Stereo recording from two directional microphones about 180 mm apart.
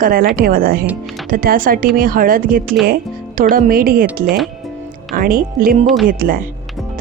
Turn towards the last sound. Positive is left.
turn(degrees=-50)  # may be behind; listen again after turning